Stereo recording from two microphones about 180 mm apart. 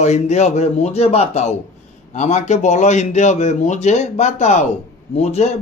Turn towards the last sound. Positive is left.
turn(degrees=40)  # may be behind; listen again after turning